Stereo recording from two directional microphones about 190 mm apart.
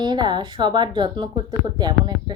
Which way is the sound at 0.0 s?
20° right (ahead or behind).